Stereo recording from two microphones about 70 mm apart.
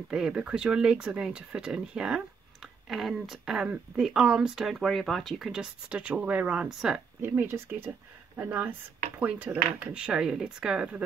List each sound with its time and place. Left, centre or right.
0.1 s speech: centre
5.5 s speech: centre
7.2 s speech: right; by 11.1 s centre